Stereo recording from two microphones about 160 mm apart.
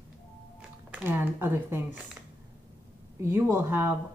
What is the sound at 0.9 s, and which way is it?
Speech, 10° right (ahead or behind).